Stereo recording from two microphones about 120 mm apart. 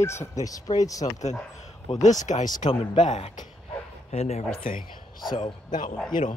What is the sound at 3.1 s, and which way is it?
Speech, 70° left (ahead or behind).